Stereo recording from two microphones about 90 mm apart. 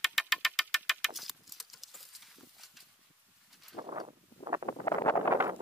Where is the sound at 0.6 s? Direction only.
Centre (ahead or behind).